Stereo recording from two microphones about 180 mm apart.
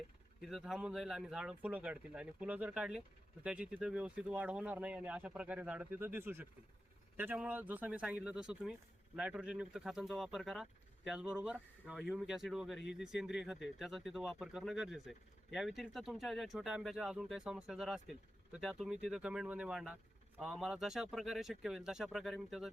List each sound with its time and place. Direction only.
0.4 s speech: centre (ahead or behind)